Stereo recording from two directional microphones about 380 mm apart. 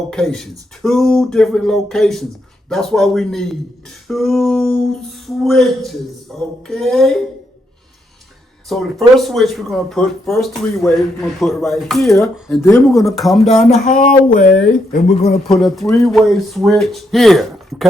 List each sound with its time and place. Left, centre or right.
0.1 s speech: centre
8.7 s speech: centre
13.7 s speech: centre
15.4 s speech: centre